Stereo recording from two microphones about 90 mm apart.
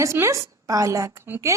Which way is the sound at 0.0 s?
35° right (ahead or behind).